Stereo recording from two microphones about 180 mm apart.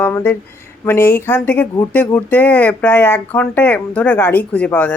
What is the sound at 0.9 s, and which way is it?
Speech, 15° left (ahead or behind).